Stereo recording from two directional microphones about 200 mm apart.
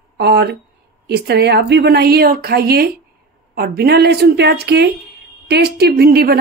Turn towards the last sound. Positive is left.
turn(degrees=-50)  # may be behind; listen again after turning